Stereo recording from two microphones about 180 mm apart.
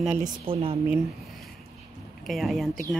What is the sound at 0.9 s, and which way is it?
Speech, centre (ahead or behind).